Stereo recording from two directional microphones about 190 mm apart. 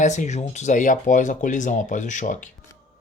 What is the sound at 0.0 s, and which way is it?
Speech, 40° left (ahead or behind).